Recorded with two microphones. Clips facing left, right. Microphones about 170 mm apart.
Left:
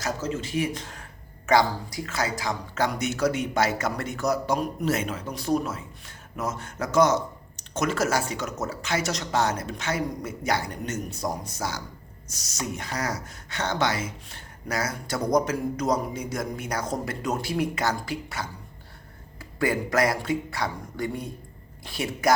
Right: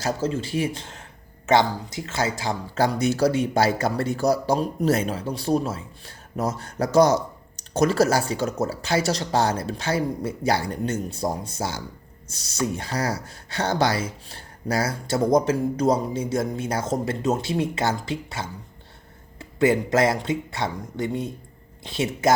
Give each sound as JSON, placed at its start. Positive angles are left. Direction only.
{"t": 0.0, "sound": "speech", "side_deg": -30}